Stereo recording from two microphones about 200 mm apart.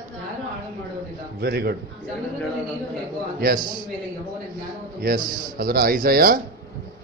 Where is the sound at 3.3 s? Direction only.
45° right (ahead or behind).